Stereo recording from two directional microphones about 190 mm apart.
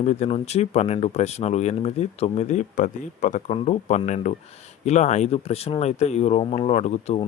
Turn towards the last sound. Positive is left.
turn(degrees=35)  # may be behind; listen again after turning